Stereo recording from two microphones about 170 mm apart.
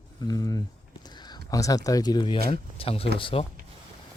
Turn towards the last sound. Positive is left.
turn(degrees=30)  # may be behind; listen again after turning